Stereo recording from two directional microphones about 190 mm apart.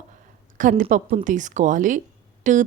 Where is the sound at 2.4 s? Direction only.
40° right (ahead or behind).